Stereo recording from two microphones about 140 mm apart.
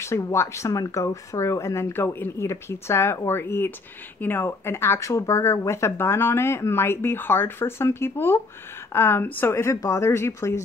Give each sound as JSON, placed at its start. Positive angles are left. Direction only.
{"t": 0.0, "sound": "speech", "side_deg": 20}